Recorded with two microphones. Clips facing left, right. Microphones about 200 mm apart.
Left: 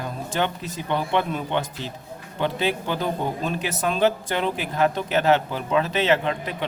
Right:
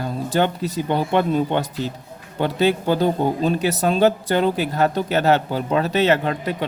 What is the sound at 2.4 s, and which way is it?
Speech, 40° right (ahead or behind).